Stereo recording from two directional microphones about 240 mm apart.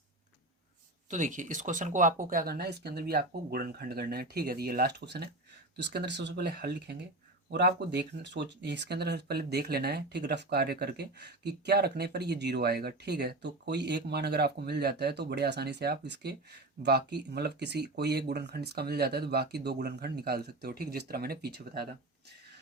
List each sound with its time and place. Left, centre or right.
1.1 s speech: right